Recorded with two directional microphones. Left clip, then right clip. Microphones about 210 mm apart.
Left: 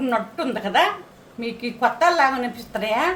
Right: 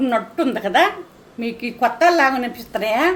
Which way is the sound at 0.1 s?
30° right (ahead or behind).